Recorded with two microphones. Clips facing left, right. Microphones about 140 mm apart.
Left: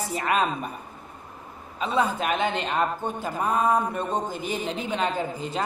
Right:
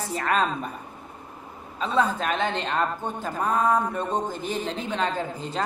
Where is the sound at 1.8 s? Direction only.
10° left (ahead or behind).